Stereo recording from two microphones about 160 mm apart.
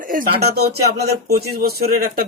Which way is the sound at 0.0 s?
60° right (ahead or behind).